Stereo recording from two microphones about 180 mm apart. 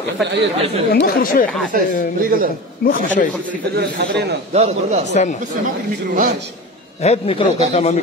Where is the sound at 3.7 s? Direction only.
65° right (ahead or behind).